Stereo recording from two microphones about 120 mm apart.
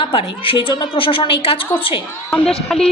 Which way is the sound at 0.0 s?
45° left (ahead or behind).